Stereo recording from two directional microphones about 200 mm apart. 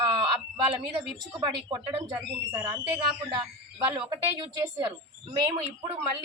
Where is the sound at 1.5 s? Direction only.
15° right (ahead or behind).